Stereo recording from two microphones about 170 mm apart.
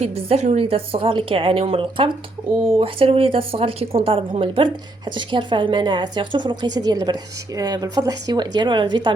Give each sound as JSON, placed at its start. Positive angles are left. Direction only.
{"t": 0.0, "sound": "a woman's voice", "side_deg": -40}